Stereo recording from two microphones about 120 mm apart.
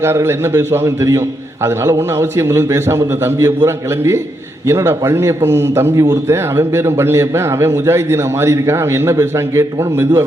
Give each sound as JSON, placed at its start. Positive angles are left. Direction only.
{"t": 0.0, "sound": "a man's voice", "side_deg": -20}